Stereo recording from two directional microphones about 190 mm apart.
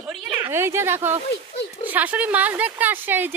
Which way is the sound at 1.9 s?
10° right (ahead or behind).